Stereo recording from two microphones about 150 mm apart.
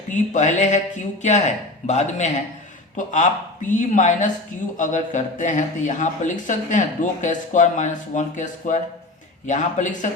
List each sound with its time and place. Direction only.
0.1 s speech: 50° left (ahead or behind)